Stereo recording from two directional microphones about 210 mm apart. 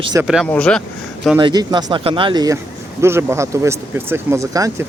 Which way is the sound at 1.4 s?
20° right (ahead or behind).